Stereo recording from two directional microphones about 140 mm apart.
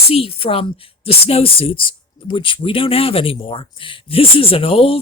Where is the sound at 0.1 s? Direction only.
45° left (ahead or behind).